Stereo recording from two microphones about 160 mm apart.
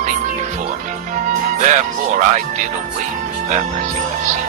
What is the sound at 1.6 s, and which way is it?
Speech, 50° right (ahead or behind).